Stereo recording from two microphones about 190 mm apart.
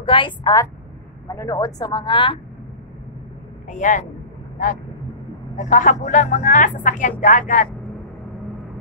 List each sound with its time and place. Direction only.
0.0 s a woman's voice: 25° left (ahead or behind)
3.6 s speech: 40° left (ahead or behind)
5.6 s speech: 40° left (ahead or behind)